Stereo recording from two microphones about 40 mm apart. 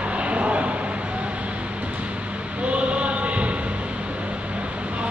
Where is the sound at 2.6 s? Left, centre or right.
Right.